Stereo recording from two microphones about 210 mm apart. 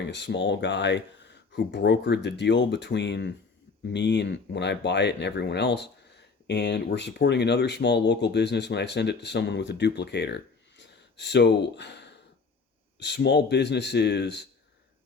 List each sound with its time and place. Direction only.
0.0 s a man's voice: 55° left (ahead or behind)